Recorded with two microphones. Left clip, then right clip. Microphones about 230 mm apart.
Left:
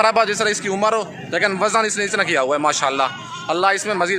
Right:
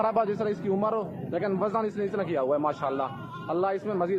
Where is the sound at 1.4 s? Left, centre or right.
Left.